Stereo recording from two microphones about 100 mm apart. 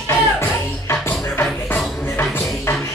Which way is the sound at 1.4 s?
25° left (ahead or behind).